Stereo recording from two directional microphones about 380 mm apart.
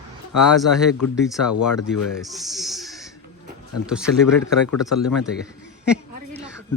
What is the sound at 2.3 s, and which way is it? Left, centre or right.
Speech, centre.